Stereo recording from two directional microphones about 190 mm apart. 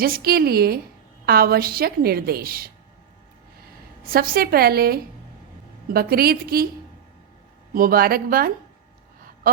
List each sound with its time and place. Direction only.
0.0 s a woman's voice: 50° right (ahead or behind)
4.0 s a woman's voice: 50° right (ahead or behind)
7.7 s a woman's voice: 50° right (ahead or behind)